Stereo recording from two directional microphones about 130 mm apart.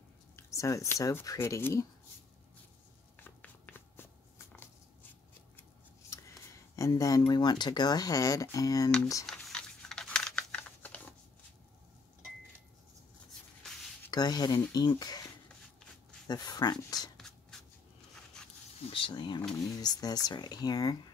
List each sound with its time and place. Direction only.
0.4 s speech: 25° left (ahead or behind)
3.2 s a sound: 15° left (ahead or behind)
5.6 s scissors: 20° left (ahead or behind)
6.7 s speech: 25° left (ahead or behind)
9.2 s computer keyboard: 5° left (ahead or behind)
14.1 s speech: 30° left (ahead or behind)
16.3 s speech: 30° left (ahead or behind)
18.9 s speech: 40° left (ahead or behind)